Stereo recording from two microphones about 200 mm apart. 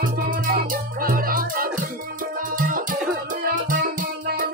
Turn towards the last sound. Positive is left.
turn(degrees=-45)  # may be behind; listen again after turning